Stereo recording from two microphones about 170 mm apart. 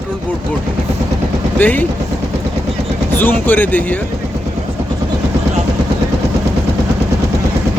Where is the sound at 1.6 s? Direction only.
10° left (ahead or behind).